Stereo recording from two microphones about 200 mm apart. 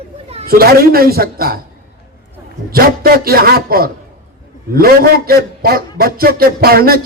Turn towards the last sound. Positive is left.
turn(degrees=-50)  # may be behind; listen again after turning